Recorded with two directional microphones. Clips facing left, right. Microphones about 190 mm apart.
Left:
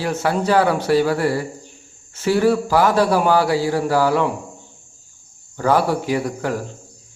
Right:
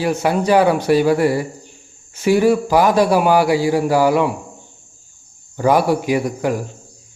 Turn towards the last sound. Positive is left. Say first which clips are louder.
# right 3 dB
turn(degrees=-15)  # may be behind; listen again after turning